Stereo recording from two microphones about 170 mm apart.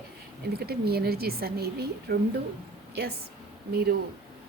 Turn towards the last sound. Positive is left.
turn(degrees=-65)  # may be behind; listen again after turning